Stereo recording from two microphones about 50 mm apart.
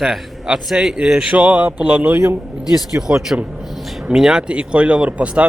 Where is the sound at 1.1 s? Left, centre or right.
Right.